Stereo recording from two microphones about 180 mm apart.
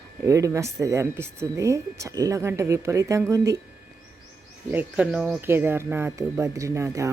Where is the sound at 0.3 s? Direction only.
15° right (ahead or behind).